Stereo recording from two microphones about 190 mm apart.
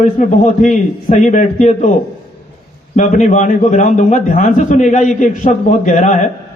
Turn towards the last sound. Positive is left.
turn(degrees=40)  # may be behind; listen again after turning